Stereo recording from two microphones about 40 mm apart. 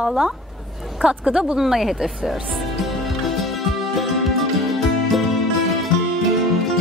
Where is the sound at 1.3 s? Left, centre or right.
Centre.